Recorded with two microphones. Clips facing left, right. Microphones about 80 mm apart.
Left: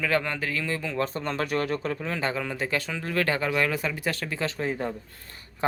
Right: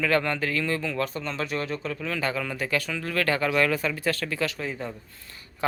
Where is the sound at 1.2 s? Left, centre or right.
Left.